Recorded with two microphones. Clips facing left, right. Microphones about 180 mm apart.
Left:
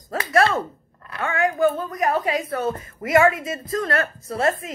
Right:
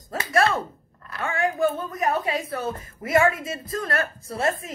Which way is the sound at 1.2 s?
25° right (ahead or behind).